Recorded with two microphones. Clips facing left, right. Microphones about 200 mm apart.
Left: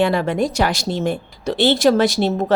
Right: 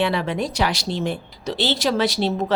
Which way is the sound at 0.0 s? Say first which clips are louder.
Left 5 dB; 45° left (ahead or behind).